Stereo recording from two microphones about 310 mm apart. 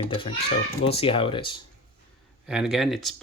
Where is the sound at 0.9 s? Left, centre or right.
Centre.